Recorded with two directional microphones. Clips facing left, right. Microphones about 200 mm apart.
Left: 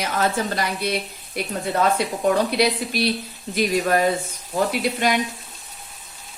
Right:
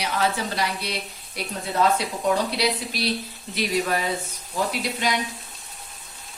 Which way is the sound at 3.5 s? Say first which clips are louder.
Left 5 dB; 50° left (ahead or behind).